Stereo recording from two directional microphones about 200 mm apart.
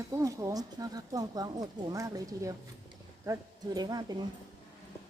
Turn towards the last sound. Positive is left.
turn(degrees=-20)  # may be behind; listen again after turning